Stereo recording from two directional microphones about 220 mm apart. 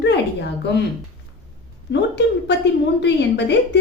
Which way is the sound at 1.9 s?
50° left (ahead or behind).